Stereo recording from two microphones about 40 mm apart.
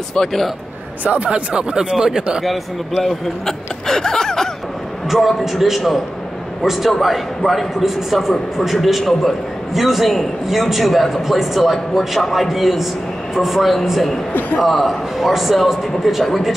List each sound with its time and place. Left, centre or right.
1.0 s speech: right; by 2.2 s centre
3.0 s speech: centre
5.1 s a man's voice: centre